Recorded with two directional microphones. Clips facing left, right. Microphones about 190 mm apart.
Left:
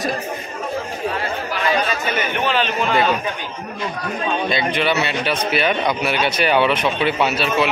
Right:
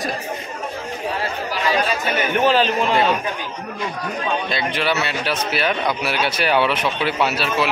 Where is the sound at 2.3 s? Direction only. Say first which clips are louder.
Right 6 dB; 40° right (ahead or behind).